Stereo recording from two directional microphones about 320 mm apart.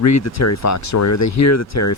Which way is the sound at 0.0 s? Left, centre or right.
Left.